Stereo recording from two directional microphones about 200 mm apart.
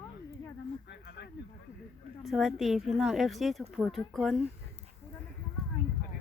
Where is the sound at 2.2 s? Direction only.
Centre (ahead or behind).